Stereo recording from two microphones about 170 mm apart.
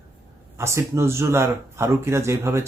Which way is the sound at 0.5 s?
15° right (ahead or behind).